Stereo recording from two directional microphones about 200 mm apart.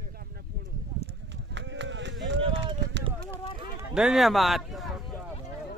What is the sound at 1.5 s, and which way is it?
Run, 65° right (ahead or behind).